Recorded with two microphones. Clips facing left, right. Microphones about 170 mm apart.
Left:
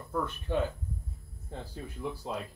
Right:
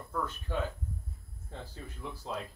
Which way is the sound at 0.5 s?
20° left (ahead or behind).